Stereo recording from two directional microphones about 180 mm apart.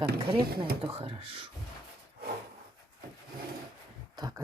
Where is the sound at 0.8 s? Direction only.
30° right (ahead or behind).